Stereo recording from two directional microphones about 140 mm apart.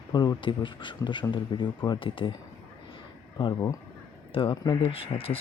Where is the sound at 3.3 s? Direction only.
30° left (ahead or behind).